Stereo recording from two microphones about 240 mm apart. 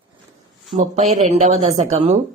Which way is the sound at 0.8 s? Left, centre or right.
Right.